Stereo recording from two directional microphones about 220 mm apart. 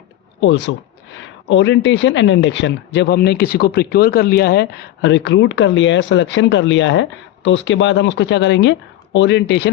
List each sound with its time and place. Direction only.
0.3 s speech: 55° left (ahead or behind)